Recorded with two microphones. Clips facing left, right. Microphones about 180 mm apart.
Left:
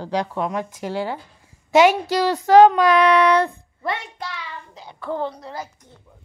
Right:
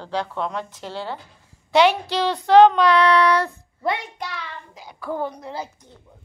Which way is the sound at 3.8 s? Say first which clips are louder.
Right 2 dB; 10° right (ahead or behind).